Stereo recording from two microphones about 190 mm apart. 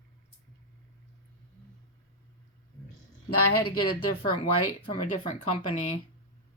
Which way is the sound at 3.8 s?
25° left (ahead or behind).